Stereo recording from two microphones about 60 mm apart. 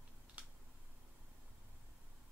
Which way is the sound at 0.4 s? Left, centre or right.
Centre.